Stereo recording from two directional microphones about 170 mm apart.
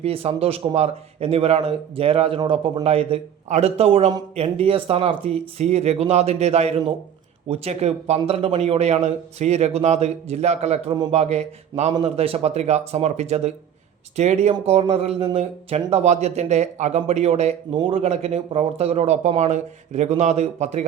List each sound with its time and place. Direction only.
0.0 s speech: 35° right (ahead or behind)